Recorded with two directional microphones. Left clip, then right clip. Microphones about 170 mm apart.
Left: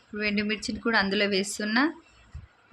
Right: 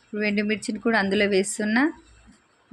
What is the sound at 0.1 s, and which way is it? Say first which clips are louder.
Speech: right 3 dB; 25° right (ahead or behind).